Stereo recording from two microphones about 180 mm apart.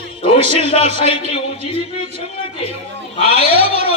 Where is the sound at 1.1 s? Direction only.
30° left (ahead or behind).